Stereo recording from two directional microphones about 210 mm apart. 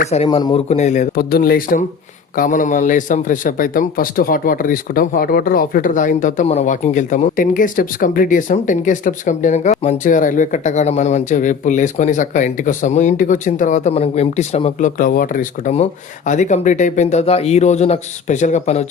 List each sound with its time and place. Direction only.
0.3 s a man's voice: 20° left (ahead or behind)